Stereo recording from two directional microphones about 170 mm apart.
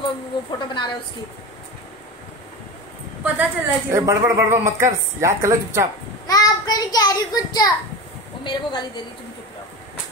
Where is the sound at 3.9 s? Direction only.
15° right (ahead or behind).